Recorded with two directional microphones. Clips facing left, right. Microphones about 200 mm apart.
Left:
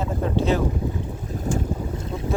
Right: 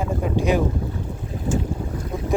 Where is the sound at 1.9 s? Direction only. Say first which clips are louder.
Right 1 dB; 25° left (ahead or behind).